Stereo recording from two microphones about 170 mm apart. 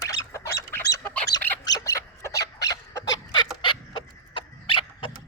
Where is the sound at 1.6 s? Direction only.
20° left (ahead or behind).